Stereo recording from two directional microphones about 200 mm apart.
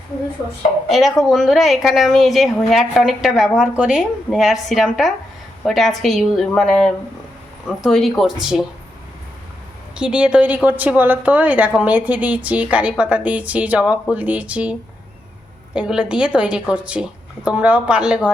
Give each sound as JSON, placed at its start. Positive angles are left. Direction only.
{"t": 0.9, "sound": "a woman's voice", "side_deg": 0}
{"t": 9.9, "sound": "a woman's voice", "side_deg": -5}